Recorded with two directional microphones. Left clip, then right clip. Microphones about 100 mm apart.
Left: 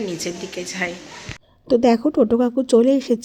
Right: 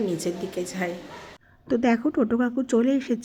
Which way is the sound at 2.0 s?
5° left (ahead or behind).